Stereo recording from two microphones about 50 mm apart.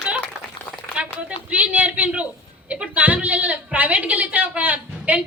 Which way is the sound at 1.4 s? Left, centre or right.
Right.